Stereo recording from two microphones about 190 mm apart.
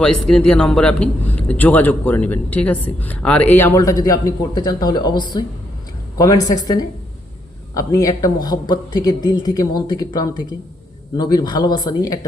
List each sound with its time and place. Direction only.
0.0 s a man's voice: 5° left (ahead or behind); by 12.2 s 20° left (ahead or behind)